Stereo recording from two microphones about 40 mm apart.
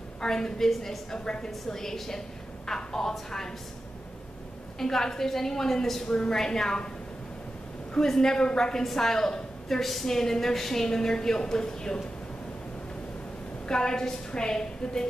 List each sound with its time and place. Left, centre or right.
0.2 s a woman's voice: centre
4.7 s a woman's voice: centre
7.9 s a woman's voice: centre
13.7 s a woman's voice: centre